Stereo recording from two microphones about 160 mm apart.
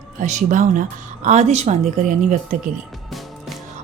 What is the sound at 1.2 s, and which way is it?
Speech, 45° right (ahead or behind).